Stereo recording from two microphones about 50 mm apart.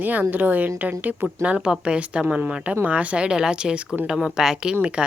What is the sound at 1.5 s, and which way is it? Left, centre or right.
Speech, right.